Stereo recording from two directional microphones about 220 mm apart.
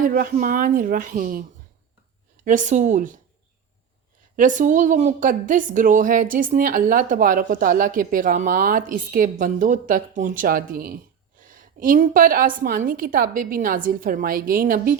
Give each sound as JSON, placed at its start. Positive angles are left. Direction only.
{"t": 0.0, "sound": "a woman's voice", "side_deg": -40}
{"t": 4.4, "sound": "a woman's voice", "side_deg": -35}